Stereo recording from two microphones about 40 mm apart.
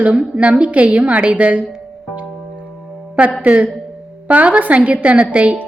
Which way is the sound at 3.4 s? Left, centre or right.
Right.